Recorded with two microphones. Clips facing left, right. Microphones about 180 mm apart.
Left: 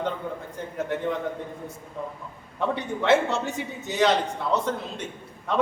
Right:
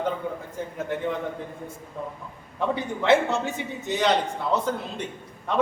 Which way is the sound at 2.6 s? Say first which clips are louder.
Even; centre (ahead or behind).